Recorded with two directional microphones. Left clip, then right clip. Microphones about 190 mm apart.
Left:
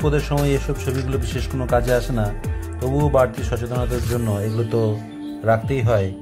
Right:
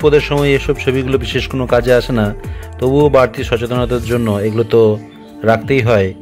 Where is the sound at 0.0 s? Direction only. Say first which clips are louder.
Right 10 dB; 25° right (ahead or behind).